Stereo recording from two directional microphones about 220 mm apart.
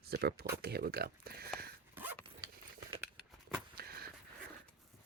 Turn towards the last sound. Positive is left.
turn(degrees=-45)  # may be behind; listen again after turning